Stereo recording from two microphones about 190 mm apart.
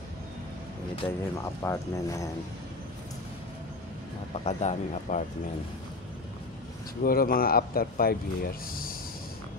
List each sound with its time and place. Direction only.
1.0 s speech: 15° left (ahead or behind)
4.5 s speech: 35° left (ahead or behind)
7.0 s a man's voice: 50° left (ahead or behind)